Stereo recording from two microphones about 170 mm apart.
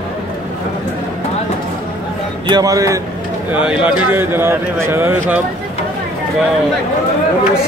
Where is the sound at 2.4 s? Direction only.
20° right (ahead or behind).